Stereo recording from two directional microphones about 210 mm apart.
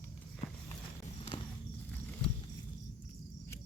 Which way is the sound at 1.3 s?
20° left (ahead or behind).